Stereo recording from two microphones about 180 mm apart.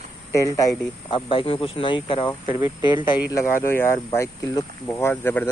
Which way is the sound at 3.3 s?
15° left (ahead or behind).